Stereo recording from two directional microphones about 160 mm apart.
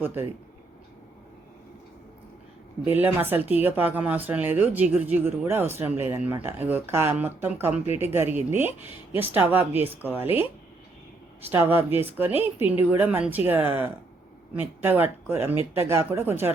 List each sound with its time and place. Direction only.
0.0 s speech: 10° right (ahead or behind)
2.8 s speech: 10° right (ahead or behind)
11.4 s speech: 15° right (ahead or behind)